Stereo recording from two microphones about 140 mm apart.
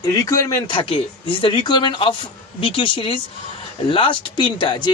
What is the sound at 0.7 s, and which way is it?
Speech, 40° left (ahead or behind).